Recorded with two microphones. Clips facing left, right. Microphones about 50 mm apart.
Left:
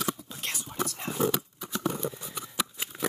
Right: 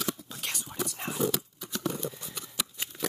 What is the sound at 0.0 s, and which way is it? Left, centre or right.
Whispering, centre.